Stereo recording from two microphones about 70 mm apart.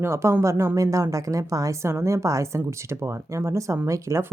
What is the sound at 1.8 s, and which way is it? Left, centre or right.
Speech, right.